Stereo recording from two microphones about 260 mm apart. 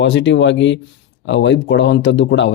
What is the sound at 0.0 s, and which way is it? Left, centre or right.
Speech, left.